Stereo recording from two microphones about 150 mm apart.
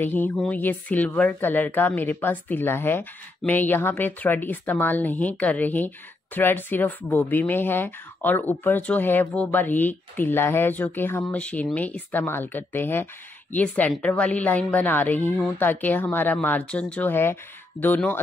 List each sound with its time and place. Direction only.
0.0 s a woman's voice: 10° left (ahead or behind)